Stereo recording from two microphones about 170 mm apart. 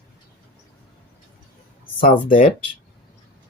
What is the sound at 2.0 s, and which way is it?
Speech, 55° left (ahead or behind).